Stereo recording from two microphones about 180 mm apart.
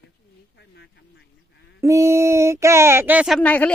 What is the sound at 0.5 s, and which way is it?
Speech, 70° left (ahead or behind).